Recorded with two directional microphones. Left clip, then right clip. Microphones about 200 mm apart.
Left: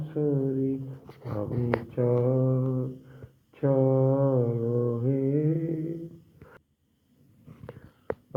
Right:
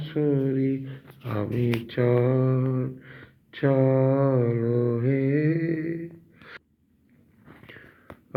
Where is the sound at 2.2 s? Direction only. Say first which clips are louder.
Right 2 dB; 15° right (ahead or behind).